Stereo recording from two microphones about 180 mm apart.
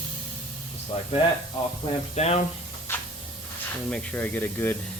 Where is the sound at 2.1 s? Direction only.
35° left (ahead or behind).